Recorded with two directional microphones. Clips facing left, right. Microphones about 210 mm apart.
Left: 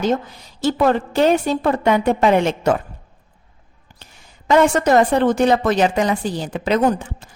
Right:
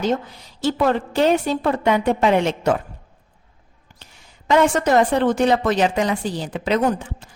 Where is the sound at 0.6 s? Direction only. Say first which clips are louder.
Left 2 dB; 45° left (ahead or behind).